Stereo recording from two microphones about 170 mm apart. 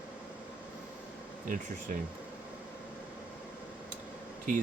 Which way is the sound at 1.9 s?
50° right (ahead or behind).